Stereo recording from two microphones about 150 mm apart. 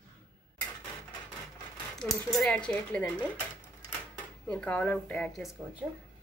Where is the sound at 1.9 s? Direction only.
Centre (ahead or behind).